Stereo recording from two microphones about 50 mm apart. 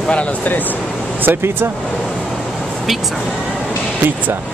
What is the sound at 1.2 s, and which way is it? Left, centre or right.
Speech, right.